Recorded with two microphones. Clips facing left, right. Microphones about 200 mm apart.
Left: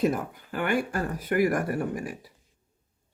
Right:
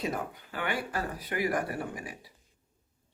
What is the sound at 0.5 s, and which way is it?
Speech, 50° left (ahead or behind).